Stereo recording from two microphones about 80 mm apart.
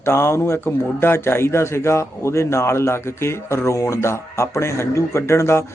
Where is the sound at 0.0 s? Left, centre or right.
Left.